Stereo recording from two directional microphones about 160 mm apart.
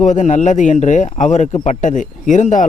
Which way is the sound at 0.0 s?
50° left (ahead or behind).